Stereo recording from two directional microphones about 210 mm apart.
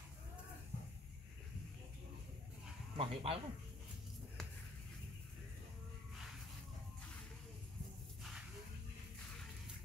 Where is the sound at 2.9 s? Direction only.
25° right (ahead or behind).